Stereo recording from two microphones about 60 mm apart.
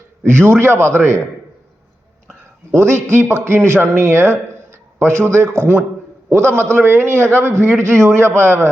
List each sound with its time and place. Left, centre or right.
0.3 s a man's voice: right
2.7 s a man's voice: right